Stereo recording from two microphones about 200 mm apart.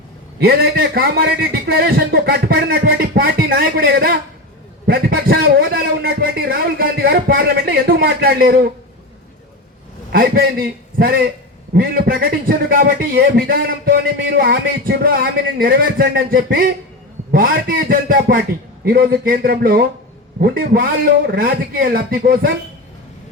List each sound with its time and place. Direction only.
0.3 s a man's voice: 50° right (ahead or behind)
10.1 s a man's voice: 45° right (ahead or behind)